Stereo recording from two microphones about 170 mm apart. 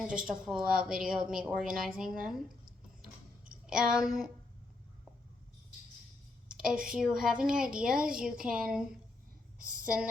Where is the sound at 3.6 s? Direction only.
5° right (ahead or behind).